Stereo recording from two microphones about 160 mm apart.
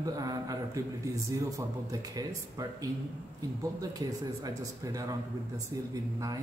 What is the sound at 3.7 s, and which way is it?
A man's voice, 20° right (ahead or behind).